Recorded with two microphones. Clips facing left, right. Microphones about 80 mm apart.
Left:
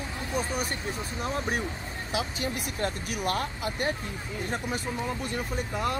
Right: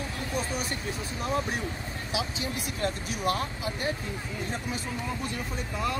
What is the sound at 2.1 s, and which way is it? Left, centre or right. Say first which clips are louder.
Speech: left 2 dB; left.